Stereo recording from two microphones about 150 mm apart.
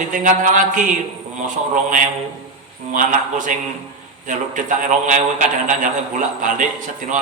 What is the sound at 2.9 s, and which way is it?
A man's voice, 60° right (ahead or behind).